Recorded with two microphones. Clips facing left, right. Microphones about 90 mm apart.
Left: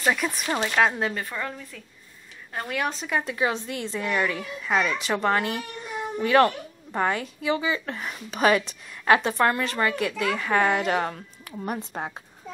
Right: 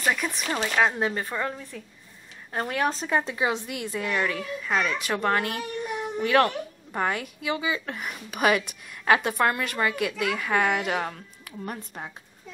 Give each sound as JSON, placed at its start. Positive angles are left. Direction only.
{"t": 0.0, "sound": "speech", "side_deg": 0}
{"t": 1.1, "sound": "a woman's voice", "side_deg": -25}
{"t": 2.7, "sound": "speech", "side_deg": -35}
{"t": 3.2, "sound": "a woman's voice", "side_deg": -20}
{"t": 4.0, "sound": "speech", "side_deg": 0}
{"t": 11.5, "sound": "a woman's voice", "side_deg": 15}
{"t": 11.9, "sound": "a woman's voice", "side_deg": 40}